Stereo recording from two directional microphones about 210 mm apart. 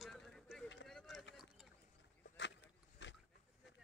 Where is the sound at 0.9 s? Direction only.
Centre (ahead or behind).